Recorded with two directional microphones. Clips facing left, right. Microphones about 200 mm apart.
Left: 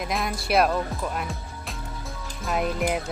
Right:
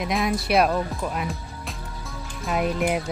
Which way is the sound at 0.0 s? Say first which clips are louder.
Right 4 dB; centre (ahead or behind).